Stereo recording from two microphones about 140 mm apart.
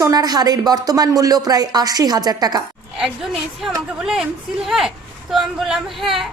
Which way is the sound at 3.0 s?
Centre (ahead or behind).